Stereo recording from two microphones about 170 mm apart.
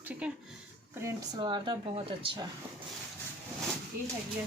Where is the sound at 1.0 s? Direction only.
20° right (ahead or behind).